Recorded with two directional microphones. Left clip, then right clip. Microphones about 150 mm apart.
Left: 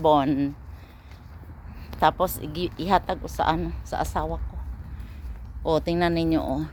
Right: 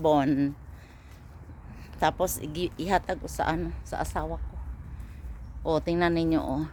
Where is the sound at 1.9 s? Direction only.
20° right (ahead or behind).